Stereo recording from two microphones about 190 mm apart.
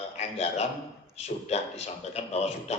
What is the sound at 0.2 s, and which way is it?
A man's voice, 35° left (ahead or behind).